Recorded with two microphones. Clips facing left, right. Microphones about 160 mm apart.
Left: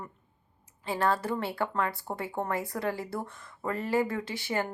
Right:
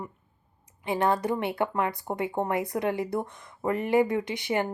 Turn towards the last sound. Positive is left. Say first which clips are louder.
# right 4 dB
turn(degrees=-20)  # may be behind; listen again after turning